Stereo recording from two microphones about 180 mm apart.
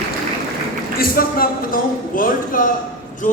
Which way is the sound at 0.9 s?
55° left (ahead or behind).